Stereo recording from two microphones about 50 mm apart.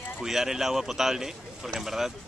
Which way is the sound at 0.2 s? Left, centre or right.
Centre.